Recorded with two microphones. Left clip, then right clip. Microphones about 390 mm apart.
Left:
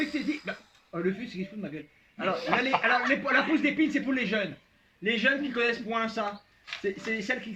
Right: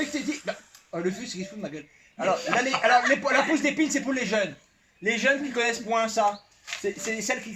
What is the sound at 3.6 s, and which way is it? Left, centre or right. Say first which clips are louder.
A man's voice: right 2 dB; centre.